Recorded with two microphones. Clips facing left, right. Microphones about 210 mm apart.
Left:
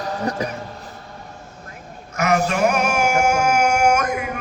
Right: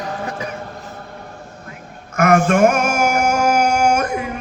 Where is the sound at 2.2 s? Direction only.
50° right (ahead or behind).